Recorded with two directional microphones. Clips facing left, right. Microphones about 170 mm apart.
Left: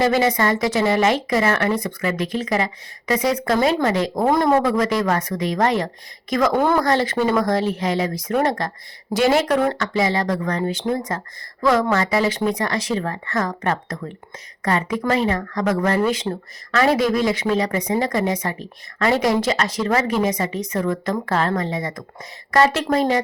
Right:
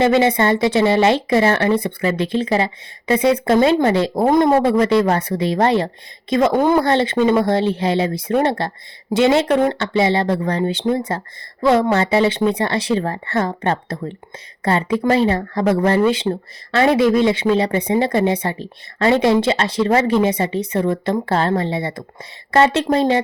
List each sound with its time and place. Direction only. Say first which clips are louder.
0.0 s speech: right 3 dB; 25° right (ahead or behind)